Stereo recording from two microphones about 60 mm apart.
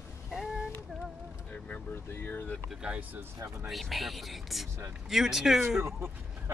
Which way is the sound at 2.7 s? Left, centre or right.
Centre.